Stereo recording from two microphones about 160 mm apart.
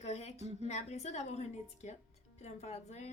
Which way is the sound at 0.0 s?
45° left (ahead or behind).